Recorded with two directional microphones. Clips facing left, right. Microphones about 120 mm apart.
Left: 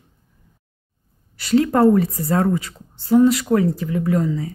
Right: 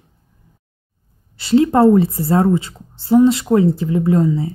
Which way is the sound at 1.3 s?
25° right (ahead or behind).